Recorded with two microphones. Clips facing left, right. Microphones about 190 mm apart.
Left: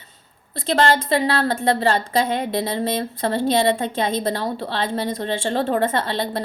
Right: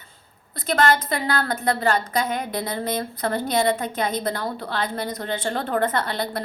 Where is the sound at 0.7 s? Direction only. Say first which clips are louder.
Left 3 dB; 25° left (ahead or behind).